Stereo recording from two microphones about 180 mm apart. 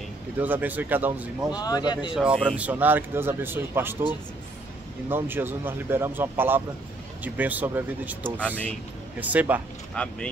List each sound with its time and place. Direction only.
0.4 s speech: 10° right (ahead or behind)
1.6 s speech: 20° left (ahead or behind)
2.1 s speech: 5° right (ahead or behind)
5.1 s speech: 10° right (ahead or behind)
10.0 s speech: 5° left (ahead or behind)